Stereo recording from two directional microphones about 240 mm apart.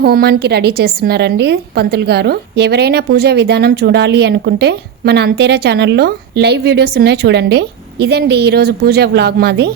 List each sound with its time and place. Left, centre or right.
0.0 s a woman's voice: right